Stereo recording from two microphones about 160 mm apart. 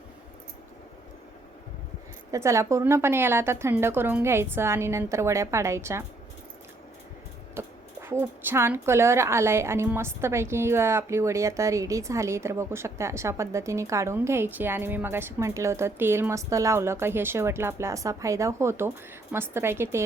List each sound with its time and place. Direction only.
2.3 s a woman's voice: 20° right (ahead or behind)
7.6 s a sound: 15° right (ahead or behind)
8.2 s a woman's voice: 15° right (ahead or behind)